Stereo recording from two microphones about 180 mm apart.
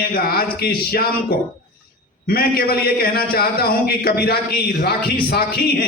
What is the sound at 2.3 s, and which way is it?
A man's voice, 55° left (ahead or behind).